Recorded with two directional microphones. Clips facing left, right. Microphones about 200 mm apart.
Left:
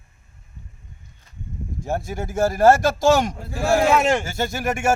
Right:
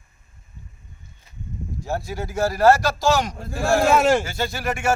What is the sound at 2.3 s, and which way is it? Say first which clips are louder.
Speech: left 1 dB; 50° left (ahead or behind).